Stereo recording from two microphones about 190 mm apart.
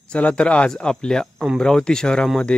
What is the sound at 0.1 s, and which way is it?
Speech, 5° left (ahead or behind).